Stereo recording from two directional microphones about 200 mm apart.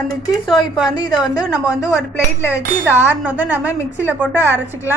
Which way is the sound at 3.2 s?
10° right (ahead or behind).